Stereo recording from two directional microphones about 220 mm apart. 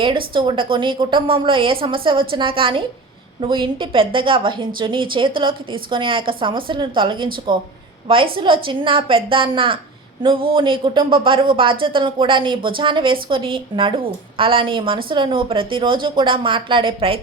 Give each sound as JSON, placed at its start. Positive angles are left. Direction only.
{"t": 0.3, "sound": "speech", "side_deg": -20}